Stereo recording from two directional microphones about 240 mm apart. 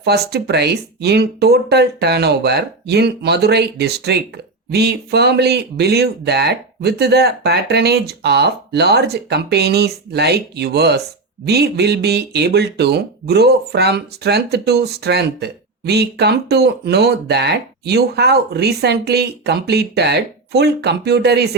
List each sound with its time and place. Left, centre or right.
0.0 s speech: right